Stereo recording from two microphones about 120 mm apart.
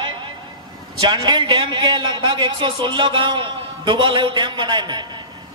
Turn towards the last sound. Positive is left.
turn(degrees=-40)  # may be behind; listen again after turning